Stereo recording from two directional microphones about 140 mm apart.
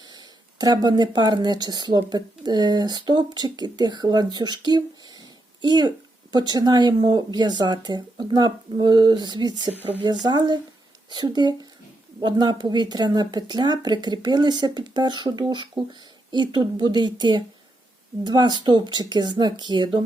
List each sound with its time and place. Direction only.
0.1 s speech: 30° right (ahead or behind)